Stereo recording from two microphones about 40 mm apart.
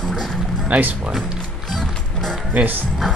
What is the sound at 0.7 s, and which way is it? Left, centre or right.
Speech, right.